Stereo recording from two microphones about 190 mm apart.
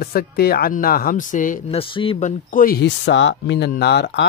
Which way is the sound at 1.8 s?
30° left (ahead or behind).